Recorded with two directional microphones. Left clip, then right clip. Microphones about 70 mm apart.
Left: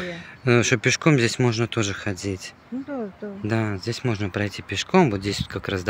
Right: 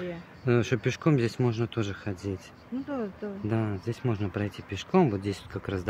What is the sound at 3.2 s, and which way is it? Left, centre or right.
Speech, left.